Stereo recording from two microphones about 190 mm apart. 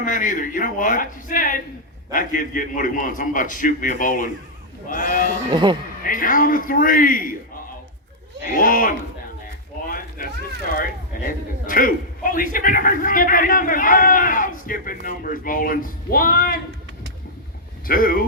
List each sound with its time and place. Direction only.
0.0 s a man's voice: 45° left (ahead or behind)
5.5 s speech: 25° right (ahead or behind)
6.0 s a man's voice: 45° left (ahead or behind)
8.5 s a man's voice: 45° left (ahead or behind)
9.8 s a sound: 50° left (ahead or behind)
11.3 s a man's voice: 45° left (ahead or behind)
17.8 s a man's voice: 50° left (ahead or behind)